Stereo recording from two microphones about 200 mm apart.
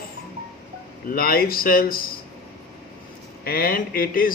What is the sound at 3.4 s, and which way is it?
Speech, 45° left (ahead or behind).